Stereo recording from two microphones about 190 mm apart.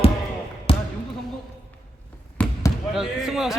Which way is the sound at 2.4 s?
5° left (ahead or behind).